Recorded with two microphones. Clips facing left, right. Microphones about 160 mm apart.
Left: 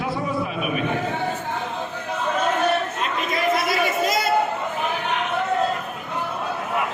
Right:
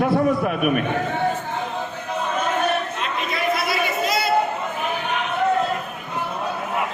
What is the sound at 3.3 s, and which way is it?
Chatter, 45° left (ahead or behind).